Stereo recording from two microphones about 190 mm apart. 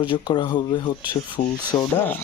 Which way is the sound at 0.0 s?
25° left (ahead or behind).